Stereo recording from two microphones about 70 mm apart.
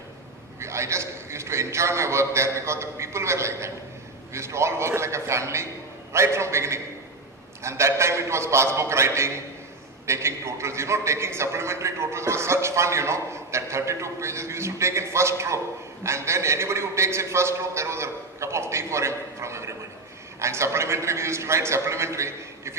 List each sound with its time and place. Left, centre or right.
0.6 s a man's voice: right